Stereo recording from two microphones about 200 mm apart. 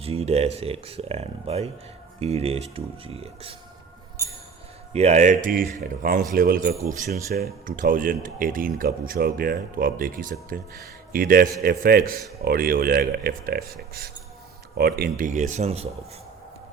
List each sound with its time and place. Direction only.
0.0 s speech: 30° right (ahead or behind)
4.9 s a man's voice: 35° right (ahead or behind); by 13.7 s 50° right (ahead or behind)
14.8 s speech: 50° right (ahead or behind); by 15.9 s 30° right (ahead or behind)